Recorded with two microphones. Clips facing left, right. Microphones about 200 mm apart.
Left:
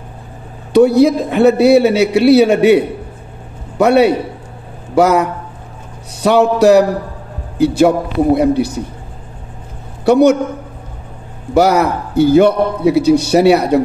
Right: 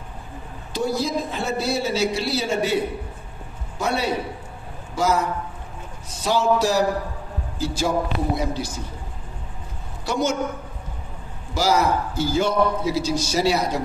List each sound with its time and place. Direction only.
0.7 s a man's voice: 65° left (ahead or behind)
10.0 s a man's voice: 65° left (ahead or behind)
11.5 s a man's voice: 60° left (ahead or behind)